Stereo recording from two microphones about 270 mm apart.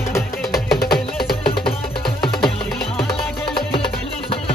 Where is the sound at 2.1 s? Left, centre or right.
Centre.